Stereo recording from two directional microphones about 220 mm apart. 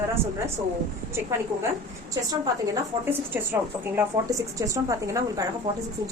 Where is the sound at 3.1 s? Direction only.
10° right (ahead or behind).